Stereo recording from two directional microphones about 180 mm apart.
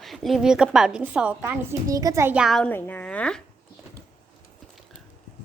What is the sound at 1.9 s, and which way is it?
A woman's voice, 20° right (ahead or behind).